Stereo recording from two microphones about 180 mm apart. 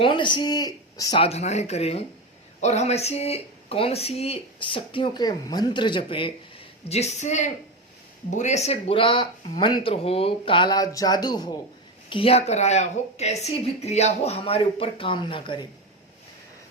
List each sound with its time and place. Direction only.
0.0 s speech: 25° left (ahead or behind)
1.2 s speech: 35° left (ahead or behind)